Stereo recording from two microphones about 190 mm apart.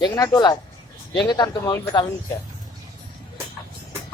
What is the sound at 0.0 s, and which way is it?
Speech, 20° left (ahead or behind).